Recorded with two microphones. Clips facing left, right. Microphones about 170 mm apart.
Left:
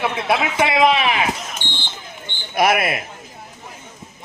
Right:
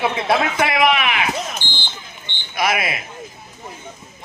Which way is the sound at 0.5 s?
25° left (ahead or behind).